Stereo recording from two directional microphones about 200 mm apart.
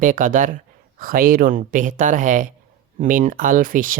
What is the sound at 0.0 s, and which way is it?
Speech, 40° right (ahead or behind).